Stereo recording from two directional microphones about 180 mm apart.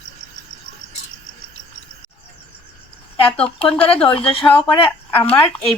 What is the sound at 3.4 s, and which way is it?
A woman's voice, 30° left (ahead or behind).